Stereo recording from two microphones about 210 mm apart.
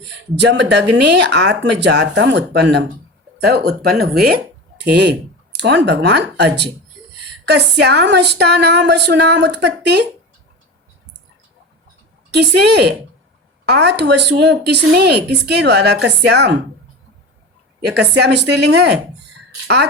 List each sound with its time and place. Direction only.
0.0 s speech: 55° right (ahead or behind)
12.3 s speech: 55° right (ahead or behind)
17.7 s speech: 50° right (ahead or behind)